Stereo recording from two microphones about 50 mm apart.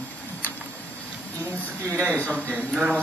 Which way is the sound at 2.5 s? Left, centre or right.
Centre.